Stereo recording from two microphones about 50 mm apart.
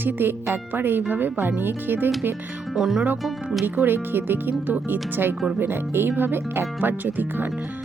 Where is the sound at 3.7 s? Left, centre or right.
Right.